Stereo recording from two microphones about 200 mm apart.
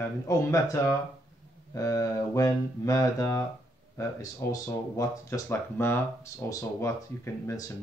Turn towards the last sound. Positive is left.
turn(degrees=15)  # may be behind; listen again after turning